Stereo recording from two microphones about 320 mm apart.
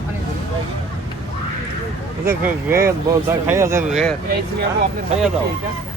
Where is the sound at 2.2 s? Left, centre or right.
Centre.